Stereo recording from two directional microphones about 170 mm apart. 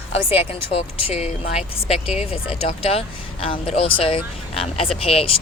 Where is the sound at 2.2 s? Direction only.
35° left (ahead or behind).